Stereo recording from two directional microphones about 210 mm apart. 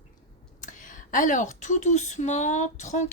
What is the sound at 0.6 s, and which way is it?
Speech, 35° left (ahead or behind).